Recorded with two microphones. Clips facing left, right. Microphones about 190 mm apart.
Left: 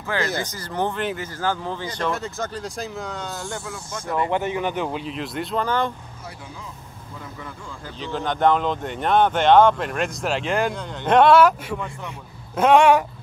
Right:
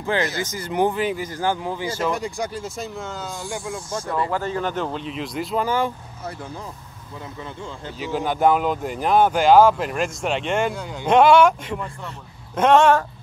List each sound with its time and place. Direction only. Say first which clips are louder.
0.0 s speech: right 2 dB; 20° right (ahead or behind); by 1.3 s 5° right (ahead or behind)
1.3 s speech: right 2 dB; 15° right (ahead or behind); by 3.4 s centre (ahead or behind)
3.6 s speech: right 5 dB; 25° right (ahead or behind)
4.1 s speech: left 2 dB; 20° left (ahead or behind); by 5.9 s 10° right (ahead or behind)
8.0 s speech: right 1 dB; 10° right (ahead or behind); by 13.0 s 10° left (ahead or behind)